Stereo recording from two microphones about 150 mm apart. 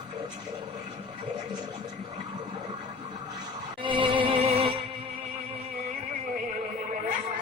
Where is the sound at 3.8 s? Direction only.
35° right (ahead or behind).